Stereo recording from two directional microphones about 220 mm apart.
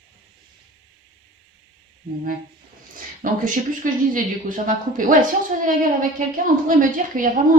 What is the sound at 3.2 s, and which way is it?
Speech, 40° right (ahead or behind).